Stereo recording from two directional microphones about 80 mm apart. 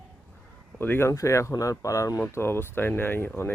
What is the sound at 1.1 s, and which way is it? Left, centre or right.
Speech, left.